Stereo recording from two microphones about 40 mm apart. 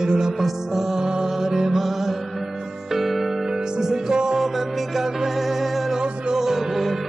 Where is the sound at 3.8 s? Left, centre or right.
Centre.